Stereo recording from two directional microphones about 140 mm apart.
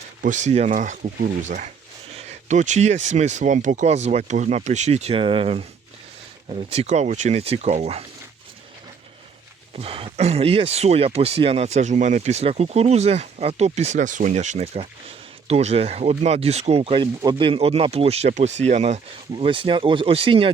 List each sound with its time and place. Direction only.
0.2 s speech: 60° right (ahead or behind)
9.7 s speech: 45° right (ahead or behind)
19.4 s speech: 40° right (ahead or behind)